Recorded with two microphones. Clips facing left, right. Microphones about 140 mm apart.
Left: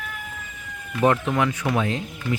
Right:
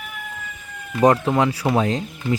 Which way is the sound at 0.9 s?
35° right (ahead or behind).